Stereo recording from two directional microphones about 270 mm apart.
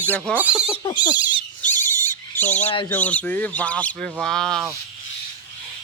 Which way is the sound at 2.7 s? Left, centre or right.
Centre.